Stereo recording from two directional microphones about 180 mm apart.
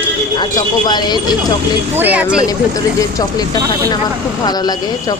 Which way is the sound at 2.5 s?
20° left (ahead or behind).